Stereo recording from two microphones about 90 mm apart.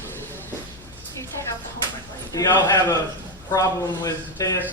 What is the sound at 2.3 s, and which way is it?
Speech, 40° left (ahead or behind).